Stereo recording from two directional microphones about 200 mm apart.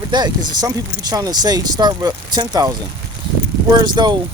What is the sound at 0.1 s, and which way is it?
Speech, 20° right (ahead or behind).